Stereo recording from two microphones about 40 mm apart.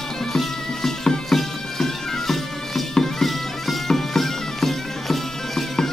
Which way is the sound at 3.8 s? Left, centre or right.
Centre.